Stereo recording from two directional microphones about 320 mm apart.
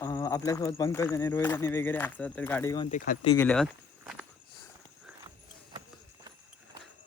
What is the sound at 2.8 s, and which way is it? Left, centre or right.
Speech, left.